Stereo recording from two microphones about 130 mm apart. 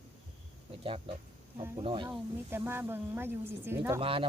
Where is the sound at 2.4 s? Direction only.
15° right (ahead or behind).